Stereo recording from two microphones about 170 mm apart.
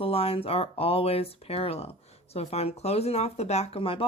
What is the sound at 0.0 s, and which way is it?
Speech, 35° left (ahead or behind).